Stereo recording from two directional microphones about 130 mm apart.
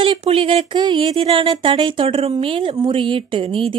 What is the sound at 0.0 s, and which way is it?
Speech, 45° right (ahead or behind).